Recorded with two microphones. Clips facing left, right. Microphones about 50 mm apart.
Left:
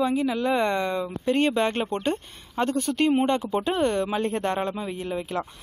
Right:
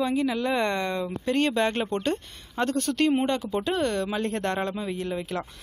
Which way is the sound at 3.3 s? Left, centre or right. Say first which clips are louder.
Left 2 dB; left.